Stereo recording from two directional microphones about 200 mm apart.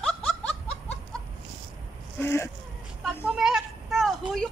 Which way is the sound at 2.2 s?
10° left (ahead or behind).